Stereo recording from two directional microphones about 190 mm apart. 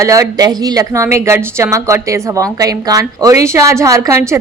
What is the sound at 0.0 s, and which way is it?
A woman's voice, 15° right (ahead or behind).